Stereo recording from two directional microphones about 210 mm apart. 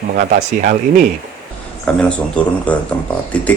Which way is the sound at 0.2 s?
45° right (ahead or behind).